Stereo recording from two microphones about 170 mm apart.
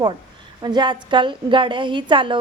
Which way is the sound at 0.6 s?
25° right (ahead or behind).